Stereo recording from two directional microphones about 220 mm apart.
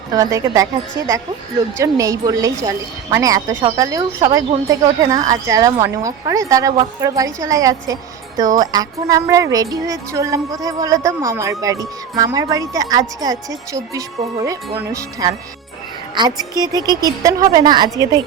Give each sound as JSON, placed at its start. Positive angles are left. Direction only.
{"t": 0.1, "sound": "speech", "side_deg": -15}